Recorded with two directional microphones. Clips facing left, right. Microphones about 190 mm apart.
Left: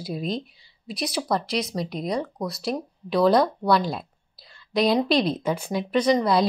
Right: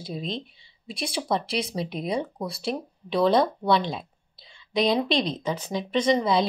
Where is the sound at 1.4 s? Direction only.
30° right (ahead or behind).